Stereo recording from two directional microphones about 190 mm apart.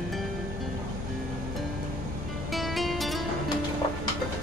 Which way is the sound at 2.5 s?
Centre (ahead or behind).